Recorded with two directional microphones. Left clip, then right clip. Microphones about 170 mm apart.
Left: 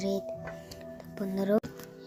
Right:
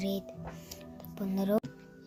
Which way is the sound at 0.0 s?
10° left (ahead or behind).